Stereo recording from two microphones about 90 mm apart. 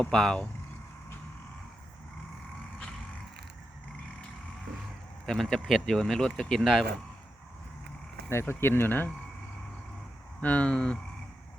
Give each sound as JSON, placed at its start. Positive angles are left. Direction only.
{"t": 0.0, "sound": "speech", "side_deg": 10}
{"t": 5.2, "sound": "speech", "side_deg": 0}
{"t": 8.3, "sound": "speech", "side_deg": 30}
{"t": 10.4, "sound": "speech", "side_deg": 15}